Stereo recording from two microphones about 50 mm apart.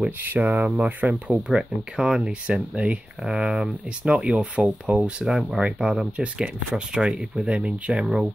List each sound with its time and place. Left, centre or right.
0.2 s speech: right
1.3 s speech: centre
5.2 s speech: centre
5.6 s speech: centre